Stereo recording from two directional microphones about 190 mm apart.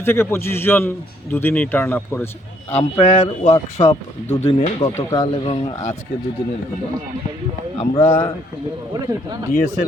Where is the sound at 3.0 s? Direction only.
30° left (ahead or behind).